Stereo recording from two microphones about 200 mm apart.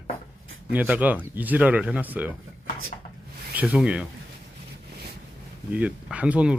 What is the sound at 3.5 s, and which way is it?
Speech, 5° right (ahead or behind).